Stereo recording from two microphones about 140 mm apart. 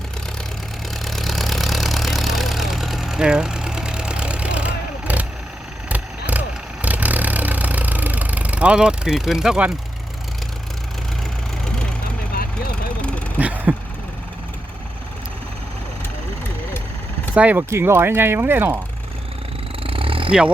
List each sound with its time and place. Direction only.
1.0 s engine: centre (ahead or behind)
5.9 s vehicle: 10° right (ahead or behind)
11.6 s vehicle: 5° left (ahead or behind)
13.4 s vehicle: 10° right (ahead or behind)
17.3 s speech: 10° right (ahead or behind)
19.8 s a sound: 40° right (ahead or behind)